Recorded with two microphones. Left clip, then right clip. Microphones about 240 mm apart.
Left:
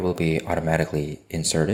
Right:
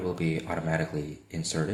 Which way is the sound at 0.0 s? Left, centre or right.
Left.